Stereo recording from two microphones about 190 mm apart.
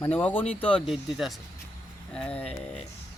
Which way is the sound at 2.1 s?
5° left (ahead or behind).